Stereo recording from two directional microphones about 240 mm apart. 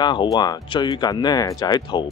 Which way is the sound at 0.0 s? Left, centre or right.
Centre.